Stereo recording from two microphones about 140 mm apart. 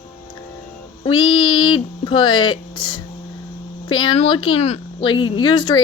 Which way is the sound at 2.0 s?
35° left (ahead or behind).